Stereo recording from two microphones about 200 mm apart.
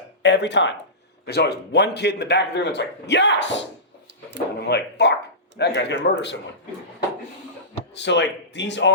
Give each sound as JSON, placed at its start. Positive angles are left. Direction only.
{"t": 0.2, "sound": "a man's voice", "side_deg": 60}
{"t": 4.7, "sound": "a man's voice", "side_deg": 55}
{"t": 7.9, "sound": "a man's voice", "side_deg": 60}